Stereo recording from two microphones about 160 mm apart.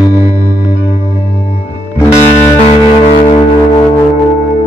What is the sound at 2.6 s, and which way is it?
Music, 40° left (ahead or behind).